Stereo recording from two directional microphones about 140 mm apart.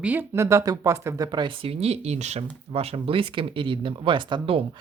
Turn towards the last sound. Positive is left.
turn(degrees=-40)  # may be behind; listen again after turning